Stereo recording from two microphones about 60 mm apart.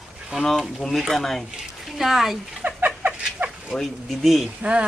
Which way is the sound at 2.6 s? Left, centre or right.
Right.